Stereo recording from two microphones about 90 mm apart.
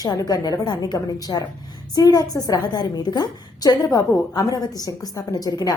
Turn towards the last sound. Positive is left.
turn(degrees=45)  # may be behind; listen again after turning